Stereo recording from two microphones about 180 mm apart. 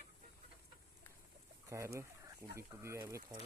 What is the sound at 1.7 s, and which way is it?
Speech, 15° right (ahead or behind).